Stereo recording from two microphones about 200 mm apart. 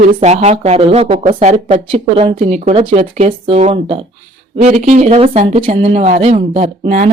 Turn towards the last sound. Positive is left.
turn(degrees=-35)  # may be behind; listen again after turning